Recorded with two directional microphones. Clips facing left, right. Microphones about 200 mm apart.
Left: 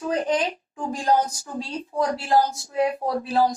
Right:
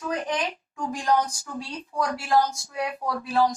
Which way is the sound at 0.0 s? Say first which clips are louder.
Left 5 dB; 30° left (ahead or behind).